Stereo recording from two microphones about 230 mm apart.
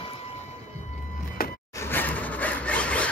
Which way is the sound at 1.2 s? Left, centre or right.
Left.